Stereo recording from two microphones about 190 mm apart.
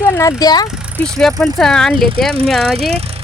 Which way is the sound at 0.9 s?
5° left (ahead or behind).